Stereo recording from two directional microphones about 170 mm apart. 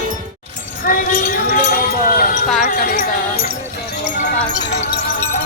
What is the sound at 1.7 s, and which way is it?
Clip-clop, 55° left (ahead or behind).